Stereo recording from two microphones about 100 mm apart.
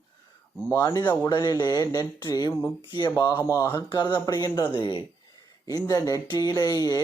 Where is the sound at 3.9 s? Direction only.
45° left (ahead or behind).